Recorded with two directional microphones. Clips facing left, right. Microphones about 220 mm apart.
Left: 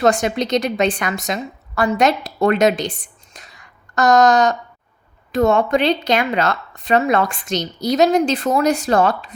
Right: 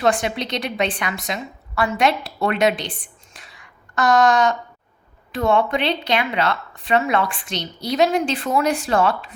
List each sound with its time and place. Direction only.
0.0 s a woman's voice: 45° left (ahead or behind)